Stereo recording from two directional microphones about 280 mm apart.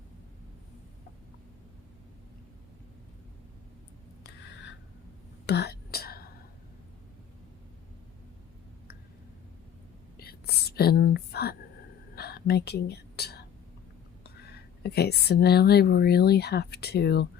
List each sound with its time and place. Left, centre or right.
4.2 s a sound: left
5.5 s whispering: left
10.2 s whispering: left
14.3 s speech: left